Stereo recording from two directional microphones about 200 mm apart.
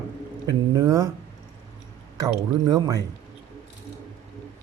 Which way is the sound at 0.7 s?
15° right (ahead or behind).